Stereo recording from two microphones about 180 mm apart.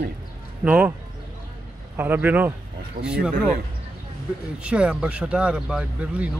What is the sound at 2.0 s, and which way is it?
A man's voice, 10° right (ahead or behind).